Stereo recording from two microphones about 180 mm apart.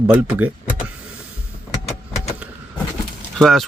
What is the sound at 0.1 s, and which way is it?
Speech, 5° right (ahead or behind).